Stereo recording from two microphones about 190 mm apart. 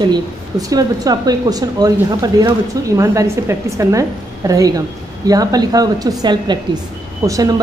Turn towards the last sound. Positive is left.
turn(degrees=-20)  # may be behind; listen again after turning